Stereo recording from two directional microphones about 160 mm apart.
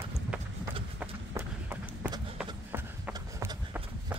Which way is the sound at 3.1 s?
25° right (ahead or behind).